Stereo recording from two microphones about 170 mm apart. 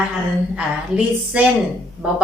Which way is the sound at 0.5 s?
5° right (ahead or behind).